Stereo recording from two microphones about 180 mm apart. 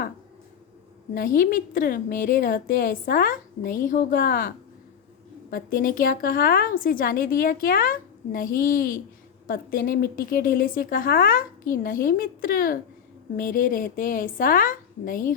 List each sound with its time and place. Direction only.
1.1 s a woman's voice: 50° left (ahead or behind)